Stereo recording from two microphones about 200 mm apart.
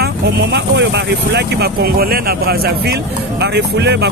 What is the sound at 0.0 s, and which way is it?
Speech, 55° right (ahead or behind).